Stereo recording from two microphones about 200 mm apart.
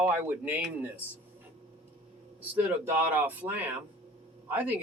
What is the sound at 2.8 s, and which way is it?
Speech, 10° right (ahead or behind).